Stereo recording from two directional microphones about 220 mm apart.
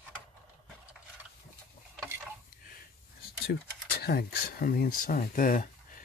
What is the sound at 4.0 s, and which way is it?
Speech, 45° left (ahead or behind).